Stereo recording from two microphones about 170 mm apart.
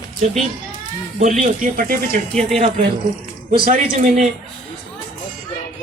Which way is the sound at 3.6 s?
50° right (ahead or behind).